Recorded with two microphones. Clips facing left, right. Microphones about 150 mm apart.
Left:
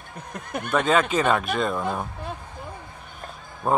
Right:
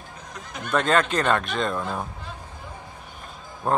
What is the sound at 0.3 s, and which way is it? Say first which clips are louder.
Speech: left 3 dB; 55° left (ahead or behind).